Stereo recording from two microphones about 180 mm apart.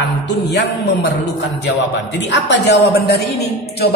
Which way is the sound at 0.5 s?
70° left (ahead or behind).